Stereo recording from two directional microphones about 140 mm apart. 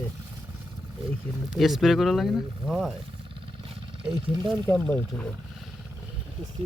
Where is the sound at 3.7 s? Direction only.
40° right (ahead or behind).